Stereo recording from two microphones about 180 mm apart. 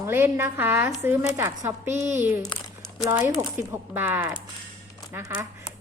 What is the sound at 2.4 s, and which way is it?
Crumpling, 20° left (ahead or behind).